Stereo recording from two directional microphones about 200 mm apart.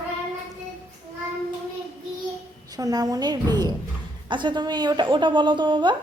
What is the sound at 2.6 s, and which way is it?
A woman's voice, 20° right (ahead or behind).